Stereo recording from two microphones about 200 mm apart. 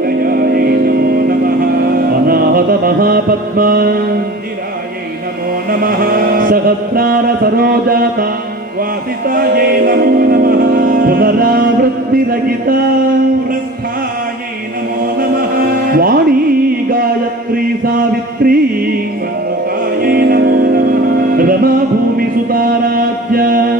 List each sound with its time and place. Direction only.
0.0 s music: 50° right (ahead or behind)
5.7 s mantra: 45° right (ahead or behind)
9.2 s music: 50° right (ahead or behind)
15.9 s music: 45° right (ahead or behind)
17.8 s music: 45° right (ahead or behind)
20.0 s music: 50° right (ahead or behind)